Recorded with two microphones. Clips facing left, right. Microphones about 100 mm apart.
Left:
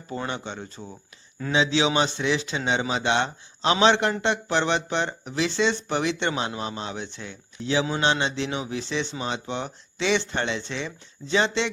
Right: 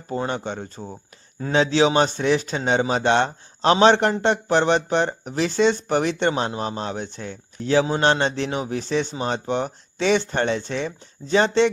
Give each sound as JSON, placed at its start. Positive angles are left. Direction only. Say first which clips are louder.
{"t": 0.1, "sound": "a man's voice", "louder": "right 5 dB", "side_deg": -40}